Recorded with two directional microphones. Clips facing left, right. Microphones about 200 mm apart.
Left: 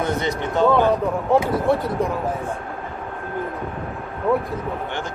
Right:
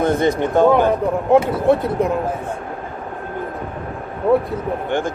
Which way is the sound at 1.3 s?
20° right (ahead or behind).